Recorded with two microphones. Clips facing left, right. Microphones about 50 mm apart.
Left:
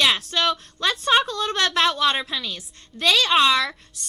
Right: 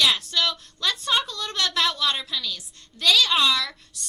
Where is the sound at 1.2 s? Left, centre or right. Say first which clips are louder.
Left 7 dB; left.